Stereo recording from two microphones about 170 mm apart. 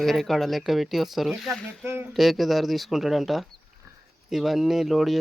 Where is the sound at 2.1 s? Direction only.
Centre (ahead or behind).